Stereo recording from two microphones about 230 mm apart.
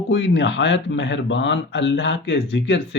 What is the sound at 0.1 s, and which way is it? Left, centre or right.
Speech, left.